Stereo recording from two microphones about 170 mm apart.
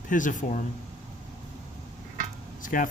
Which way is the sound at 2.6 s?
55° left (ahead or behind).